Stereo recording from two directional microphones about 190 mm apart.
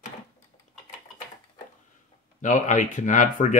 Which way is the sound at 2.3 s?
40° left (ahead or behind).